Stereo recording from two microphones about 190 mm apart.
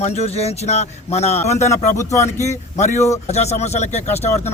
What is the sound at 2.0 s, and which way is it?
Speech, 15° left (ahead or behind).